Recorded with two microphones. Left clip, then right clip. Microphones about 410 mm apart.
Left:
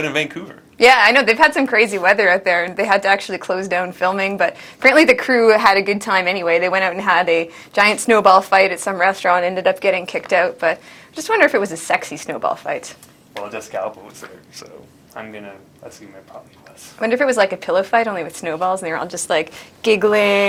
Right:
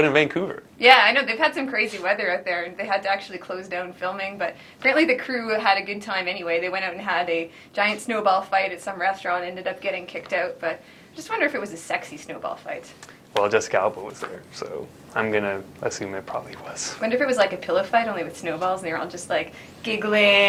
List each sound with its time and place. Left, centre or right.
0.1 s speech: right
0.8 s a woman's voice: left
13.7 s speech: right
15.1 s speech: right
17.0 s a woman's voice: left